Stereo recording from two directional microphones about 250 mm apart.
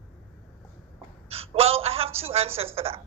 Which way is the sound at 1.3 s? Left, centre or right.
Right.